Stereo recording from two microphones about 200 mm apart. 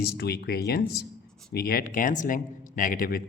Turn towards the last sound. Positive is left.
turn(degrees=45)  # may be behind; listen again after turning